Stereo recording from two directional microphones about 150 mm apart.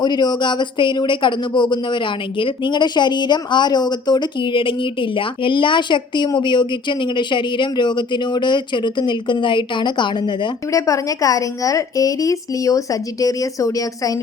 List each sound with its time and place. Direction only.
0.0 s speech: 30° left (ahead or behind)